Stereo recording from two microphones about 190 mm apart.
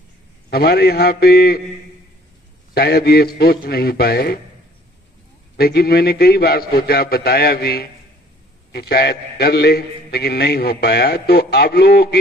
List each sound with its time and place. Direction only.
0.5 s a man's voice: 60° left (ahead or behind)
2.7 s a man's voice: 55° left (ahead or behind)
5.6 s a man's voice: 55° left (ahead or behind)